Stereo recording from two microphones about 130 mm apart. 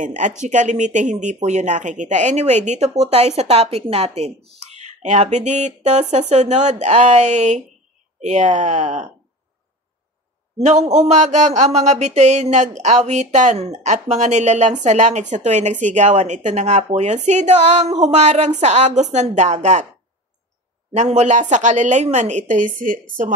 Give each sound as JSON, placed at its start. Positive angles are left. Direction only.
{"t": 0.0, "sound": "speech", "side_deg": -75}
{"t": 10.6, "sound": "speech", "side_deg": -60}
{"t": 20.9, "sound": "speech", "side_deg": -60}